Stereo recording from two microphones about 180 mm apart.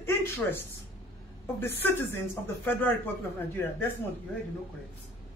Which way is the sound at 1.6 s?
10° left (ahead or behind).